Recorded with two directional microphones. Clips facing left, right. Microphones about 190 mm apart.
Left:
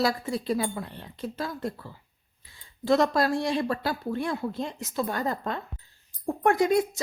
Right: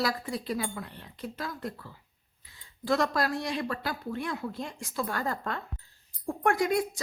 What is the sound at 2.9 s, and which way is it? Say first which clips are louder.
A woman's voice: left 5 dB; 25° left (ahead or behind).